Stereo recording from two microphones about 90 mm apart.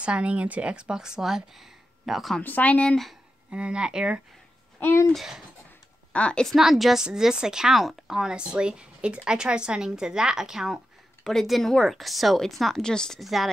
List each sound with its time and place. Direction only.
0.0 s a woman's voice: 15° right (ahead or behind)
2.4 s speech: 20° left (ahead or behind)
3.4 s a woman's voice: 10° right (ahead or behind)
4.7 s speech: 25° left (ahead or behind)
5.0 s speech: centre (ahead or behind)
6.1 s speech: 15° left (ahead or behind)
6.4 s a woman's voice: centre (ahead or behind)